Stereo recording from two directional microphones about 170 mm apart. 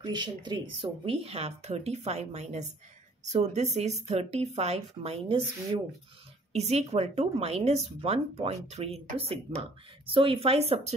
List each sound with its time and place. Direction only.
0.0 s speech: 25° right (ahead or behind)
6.5 s speech: 40° right (ahead or behind)